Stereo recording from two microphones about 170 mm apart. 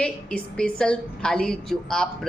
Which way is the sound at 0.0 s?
5° left (ahead or behind).